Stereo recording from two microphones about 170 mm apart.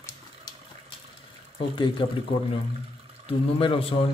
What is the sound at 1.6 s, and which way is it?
Speech, 30° left (ahead or behind).